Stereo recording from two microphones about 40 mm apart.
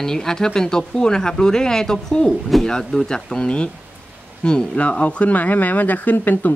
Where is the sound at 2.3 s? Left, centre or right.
Centre.